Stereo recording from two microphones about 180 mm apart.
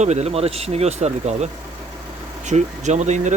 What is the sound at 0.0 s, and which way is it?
Speech, 40° right (ahead or behind).